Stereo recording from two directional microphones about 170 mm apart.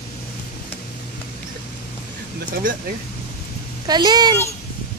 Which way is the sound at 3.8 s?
25° right (ahead or behind).